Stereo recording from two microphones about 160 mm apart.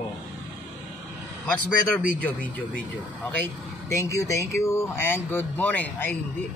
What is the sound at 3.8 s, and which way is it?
Speech, 20° left (ahead or behind).